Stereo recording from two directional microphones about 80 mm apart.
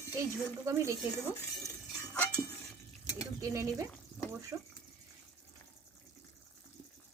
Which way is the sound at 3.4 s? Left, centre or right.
Right.